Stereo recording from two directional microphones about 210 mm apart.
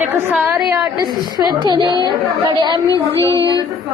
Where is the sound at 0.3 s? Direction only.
5° right (ahead or behind).